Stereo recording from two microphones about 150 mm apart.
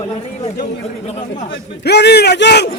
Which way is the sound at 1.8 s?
90° left.